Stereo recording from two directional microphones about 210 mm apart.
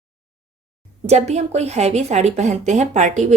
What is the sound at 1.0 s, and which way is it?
A woman's voice, 30° right (ahead or behind).